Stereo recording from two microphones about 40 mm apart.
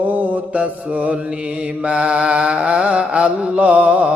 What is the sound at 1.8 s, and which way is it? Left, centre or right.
Music, right.